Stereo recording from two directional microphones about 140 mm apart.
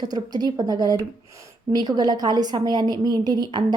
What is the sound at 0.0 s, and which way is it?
A woman's voice, 30° right (ahead or behind).